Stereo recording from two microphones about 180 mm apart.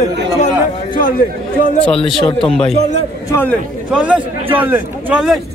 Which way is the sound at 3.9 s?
5° right (ahead or behind).